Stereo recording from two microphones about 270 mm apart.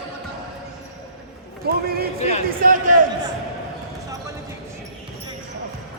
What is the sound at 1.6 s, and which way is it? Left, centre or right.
Speech, right.